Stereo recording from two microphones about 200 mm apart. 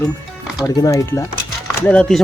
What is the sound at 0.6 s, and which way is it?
Speech, 20° left (ahead or behind).